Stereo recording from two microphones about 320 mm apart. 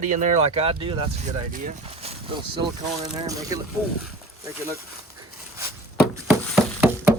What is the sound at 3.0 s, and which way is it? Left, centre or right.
Speech, centre.